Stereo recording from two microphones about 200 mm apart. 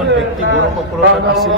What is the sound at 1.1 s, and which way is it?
Speech, centre (ahead or behind).